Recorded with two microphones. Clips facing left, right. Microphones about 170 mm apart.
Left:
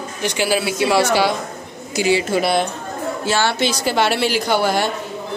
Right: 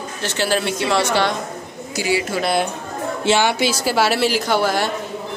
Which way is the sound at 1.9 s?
20° left (ahead or behind).